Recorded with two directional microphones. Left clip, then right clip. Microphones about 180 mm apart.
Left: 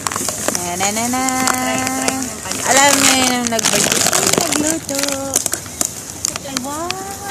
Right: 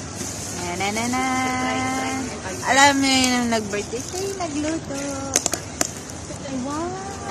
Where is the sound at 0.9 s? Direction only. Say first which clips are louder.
Left 3 dB; 60° left (ahead or behind).